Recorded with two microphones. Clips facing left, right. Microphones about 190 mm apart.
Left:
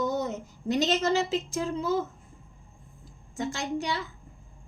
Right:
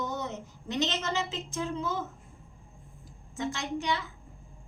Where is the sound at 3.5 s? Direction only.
35° left (ahead or behind).